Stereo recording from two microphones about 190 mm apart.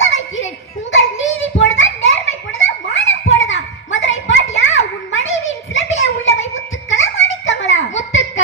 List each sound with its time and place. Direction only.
0.0 s children playing: 80° left
4.5 s a sound: 80° left
6.5 s music: 80° left